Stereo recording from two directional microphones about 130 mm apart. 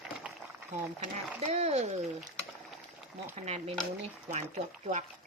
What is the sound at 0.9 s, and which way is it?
Speech, 60° right (ahead or behind).